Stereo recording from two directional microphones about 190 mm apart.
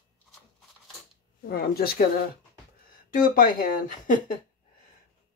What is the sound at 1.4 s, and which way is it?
Speech, 55° left (ahead or behind).